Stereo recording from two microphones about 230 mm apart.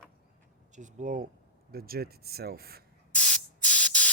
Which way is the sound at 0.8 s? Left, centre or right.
Right.